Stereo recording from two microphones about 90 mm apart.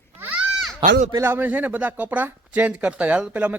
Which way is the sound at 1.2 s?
25° right (ahead or behind).